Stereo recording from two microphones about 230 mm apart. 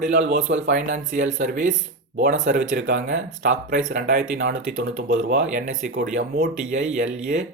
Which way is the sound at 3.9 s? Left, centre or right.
Right.